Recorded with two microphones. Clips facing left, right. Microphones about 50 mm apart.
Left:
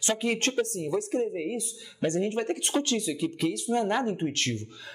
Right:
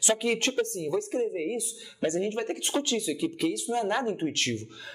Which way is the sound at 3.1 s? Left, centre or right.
Centre.